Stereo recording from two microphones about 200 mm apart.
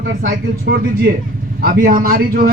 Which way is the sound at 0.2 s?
45° right (ahead or behind).